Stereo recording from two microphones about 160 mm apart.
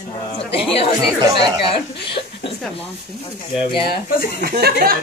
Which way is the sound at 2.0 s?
30° left (ahead or behind).